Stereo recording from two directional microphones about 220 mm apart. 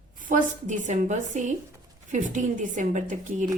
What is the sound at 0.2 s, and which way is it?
Speech, 35° right (ahead or behind).